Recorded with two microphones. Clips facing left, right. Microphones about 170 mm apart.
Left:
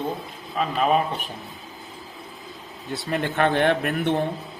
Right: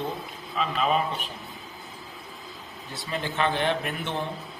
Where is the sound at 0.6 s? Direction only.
45° left (ahead or behind).